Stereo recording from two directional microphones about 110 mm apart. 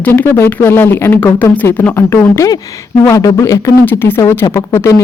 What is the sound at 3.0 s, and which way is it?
Speech, 30° left (ahead or behind).